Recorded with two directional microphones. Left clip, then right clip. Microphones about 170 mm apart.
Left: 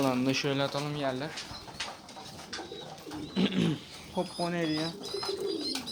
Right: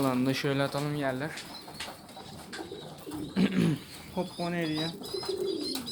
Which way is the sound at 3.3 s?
15° left (ahead or behind).